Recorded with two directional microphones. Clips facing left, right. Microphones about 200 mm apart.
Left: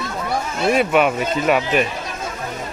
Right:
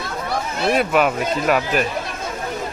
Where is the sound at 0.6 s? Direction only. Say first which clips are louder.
Left 1 dB; centre (ahead or behind).